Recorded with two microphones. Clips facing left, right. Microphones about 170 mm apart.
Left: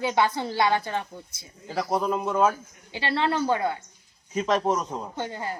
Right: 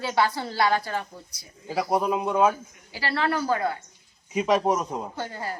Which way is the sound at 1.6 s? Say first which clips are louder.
Right 1 dB; 5° right (ahead or behind).